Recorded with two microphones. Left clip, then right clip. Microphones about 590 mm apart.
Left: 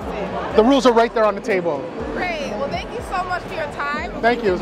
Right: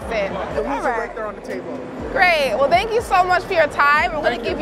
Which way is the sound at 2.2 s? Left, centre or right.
Right.